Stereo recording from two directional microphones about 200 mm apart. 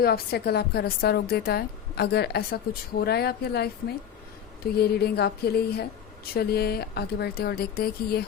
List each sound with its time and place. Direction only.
0.0 s a woman's voice: 50° left (ahead or behind)